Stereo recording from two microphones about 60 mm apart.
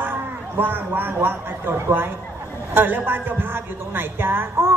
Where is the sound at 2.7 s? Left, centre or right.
Right.